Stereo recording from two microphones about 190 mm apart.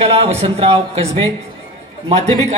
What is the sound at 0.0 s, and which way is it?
Speech, 30° right (ahead or behind).